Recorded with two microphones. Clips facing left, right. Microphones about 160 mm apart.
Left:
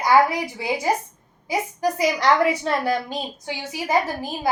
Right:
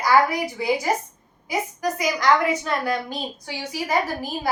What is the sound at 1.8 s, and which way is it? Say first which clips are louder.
A woman's voice: left 2 dB; 30° left (ahead or behind).